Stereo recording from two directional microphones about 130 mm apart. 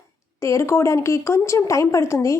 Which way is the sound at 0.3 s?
20° left (ahead or behind).